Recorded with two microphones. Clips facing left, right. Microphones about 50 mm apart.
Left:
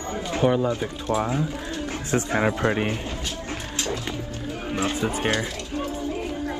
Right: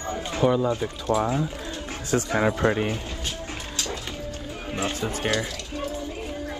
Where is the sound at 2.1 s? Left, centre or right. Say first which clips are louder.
Even; left.